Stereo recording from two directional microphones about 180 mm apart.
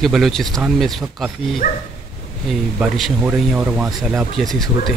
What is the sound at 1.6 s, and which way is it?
Dog, 50° left (ahead or behind).